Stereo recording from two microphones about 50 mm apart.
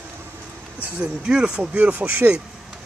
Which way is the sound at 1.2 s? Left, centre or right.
Centre.